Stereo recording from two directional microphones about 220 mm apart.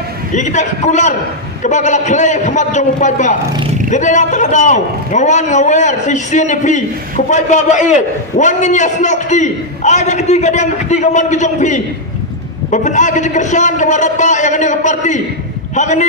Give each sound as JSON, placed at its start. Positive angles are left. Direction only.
{"t": 0.4, "sound": "a man's voice", "side_deg": 30}